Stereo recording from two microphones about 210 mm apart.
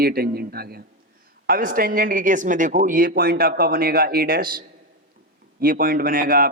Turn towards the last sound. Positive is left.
turn(degrees=-45)  # may be behind; listen again after turning